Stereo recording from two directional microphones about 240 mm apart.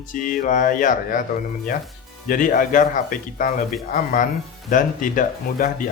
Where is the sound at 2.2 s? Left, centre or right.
Left.